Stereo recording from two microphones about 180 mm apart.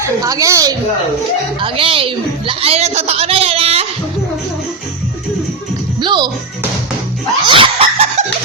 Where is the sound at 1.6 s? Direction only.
30° right (ahead or behind).